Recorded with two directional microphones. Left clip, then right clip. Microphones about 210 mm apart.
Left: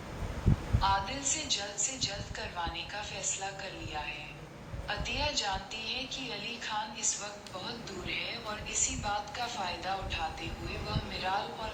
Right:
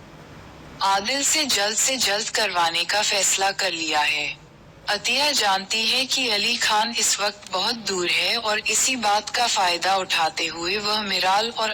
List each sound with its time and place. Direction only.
0.8 s a woman's voice: 60° right (ahead or behind)